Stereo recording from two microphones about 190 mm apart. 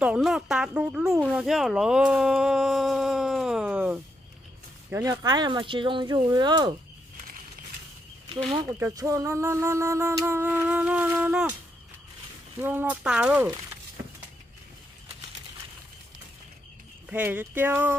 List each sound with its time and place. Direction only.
0.0 s speech: 5° right (ahead or behind); by 6.7 s 25° right (ahead or behind)
8.5 s speech: 15° right (ahead or behind)
12.6 s speech: 10° right (ahead or behind)
17.1 s speech: 10° right (ahead or behind)